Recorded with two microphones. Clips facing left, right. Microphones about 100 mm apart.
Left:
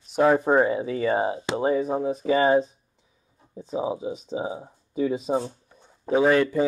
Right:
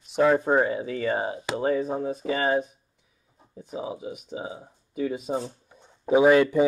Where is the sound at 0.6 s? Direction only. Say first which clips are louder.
Left 3 dB; 25° left (ahead or behind).